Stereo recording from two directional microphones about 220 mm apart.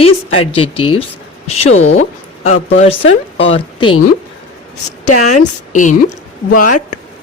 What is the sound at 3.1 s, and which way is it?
Speech, 55° left (ahead or behind).